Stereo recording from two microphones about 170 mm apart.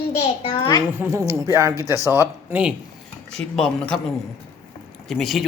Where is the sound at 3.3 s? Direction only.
5° left (ahead or behind).